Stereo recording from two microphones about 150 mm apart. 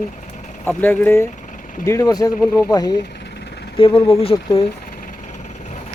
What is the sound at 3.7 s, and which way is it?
Speech, 35° left (ahead or behind).